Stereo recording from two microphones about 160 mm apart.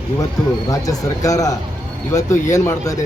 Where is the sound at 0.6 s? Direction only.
20° left (ahead or behind).